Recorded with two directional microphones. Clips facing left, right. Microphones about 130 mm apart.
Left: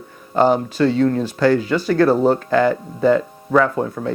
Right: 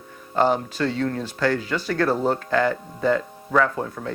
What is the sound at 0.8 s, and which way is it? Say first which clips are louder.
Speech: left 8 dB; 20° left (ahead or behind).